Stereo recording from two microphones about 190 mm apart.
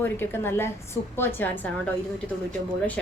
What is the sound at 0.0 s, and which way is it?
A woman's voice, 10° left (ahead or behind).